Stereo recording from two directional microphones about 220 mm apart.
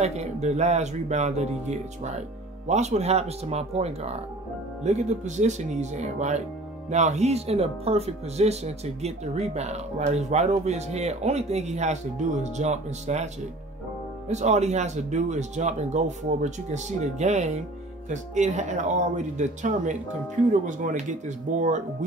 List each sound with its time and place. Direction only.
0.0 s speech: 30° right (ahead or behind)